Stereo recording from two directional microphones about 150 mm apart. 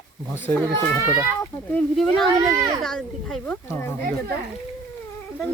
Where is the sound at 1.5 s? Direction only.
25° left (ahead or behind).